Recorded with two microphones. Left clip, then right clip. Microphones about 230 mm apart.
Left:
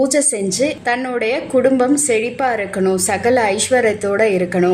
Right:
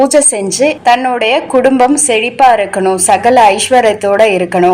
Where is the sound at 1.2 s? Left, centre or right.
Right.